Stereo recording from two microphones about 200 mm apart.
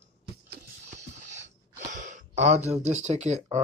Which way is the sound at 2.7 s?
35° right (ahead or behind).